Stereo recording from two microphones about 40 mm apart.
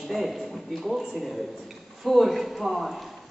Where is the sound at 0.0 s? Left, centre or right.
Centre.